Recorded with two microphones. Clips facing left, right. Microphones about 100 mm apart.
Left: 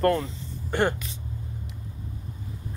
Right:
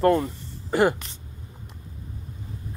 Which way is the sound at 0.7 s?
5° right (ahead or behind).